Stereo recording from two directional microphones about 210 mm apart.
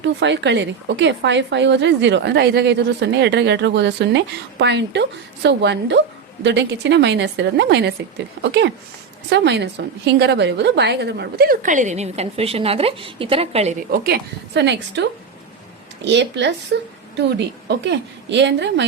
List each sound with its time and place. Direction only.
0.0 s a woman's voice: 55° right (ahead or behind); by 13.7 s 30° right (ahead or behind)
13.9 s a woman's voice: 50° right (ahead or behind)